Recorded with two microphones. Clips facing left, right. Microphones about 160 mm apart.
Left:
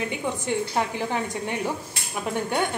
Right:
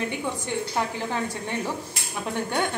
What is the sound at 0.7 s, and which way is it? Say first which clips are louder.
Speech: left 1 dB; 15° left (ahead or behind).